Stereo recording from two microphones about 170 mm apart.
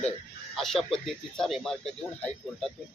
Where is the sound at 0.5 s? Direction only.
Centre (ahead or behind).